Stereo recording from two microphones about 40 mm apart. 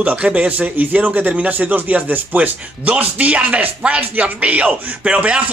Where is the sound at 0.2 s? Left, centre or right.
Right.